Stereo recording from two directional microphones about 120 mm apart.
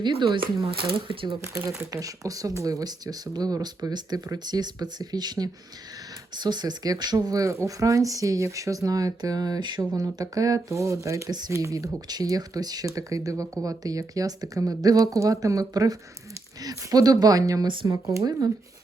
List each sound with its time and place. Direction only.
0.0 s speech: 40° right (ahead or behind)
1.4 s speech: 25° right (ahead or behind)